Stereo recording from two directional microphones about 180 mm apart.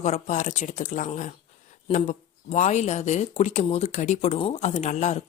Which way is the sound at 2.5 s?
40° left (ahead or behind).